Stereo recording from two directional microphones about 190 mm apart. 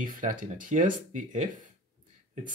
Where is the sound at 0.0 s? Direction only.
45° right (ahead or behind).